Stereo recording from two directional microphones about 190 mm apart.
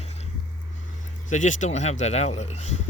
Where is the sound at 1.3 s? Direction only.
40° left (ahead or behind).